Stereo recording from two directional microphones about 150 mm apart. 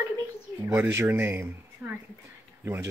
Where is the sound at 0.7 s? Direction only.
15° right (ahead or behind).